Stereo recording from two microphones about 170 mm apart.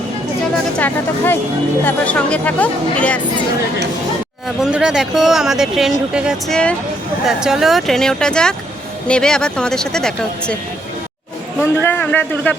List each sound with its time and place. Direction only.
0.8 s speech: 10° left (ahead or behind)
4.4 s speech: 5° right (ahead or behind)
11.6 s speech: 10° left (ahead or behind)